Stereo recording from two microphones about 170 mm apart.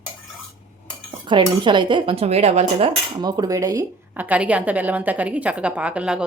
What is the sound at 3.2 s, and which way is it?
A woman's voice, 20° right (ahead or behind).